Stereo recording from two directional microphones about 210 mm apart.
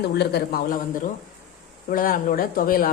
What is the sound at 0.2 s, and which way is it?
A woman's voice, 45° left (ahead or behind).